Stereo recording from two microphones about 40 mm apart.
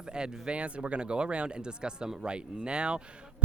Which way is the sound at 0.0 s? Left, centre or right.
Centre.